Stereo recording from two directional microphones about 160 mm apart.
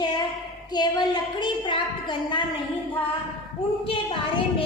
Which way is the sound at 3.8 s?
35° left (ahead or behind).